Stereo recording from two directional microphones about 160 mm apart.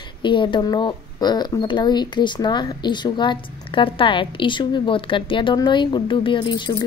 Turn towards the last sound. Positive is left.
turn(degrees=25)  # may be behind; listen again after turning